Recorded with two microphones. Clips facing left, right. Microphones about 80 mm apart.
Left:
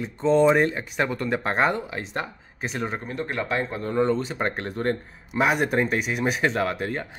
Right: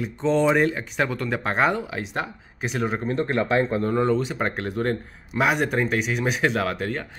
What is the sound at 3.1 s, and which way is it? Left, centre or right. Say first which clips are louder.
Speech: right 7 dB; right.